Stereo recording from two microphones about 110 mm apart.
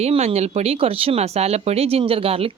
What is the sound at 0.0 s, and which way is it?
A woman's voice, 65° right (ahead or behind).